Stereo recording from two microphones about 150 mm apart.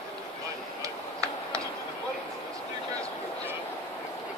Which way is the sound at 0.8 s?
20° right (ahead or behind).